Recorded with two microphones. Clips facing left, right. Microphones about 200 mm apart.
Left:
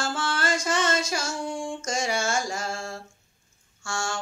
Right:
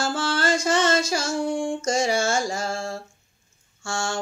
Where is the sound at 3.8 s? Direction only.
30° right (ahead or behind).